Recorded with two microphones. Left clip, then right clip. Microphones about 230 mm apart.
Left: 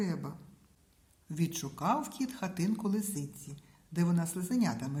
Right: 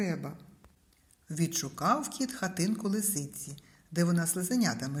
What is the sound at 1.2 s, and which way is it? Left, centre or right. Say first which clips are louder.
Speech: right 4 dB; centre.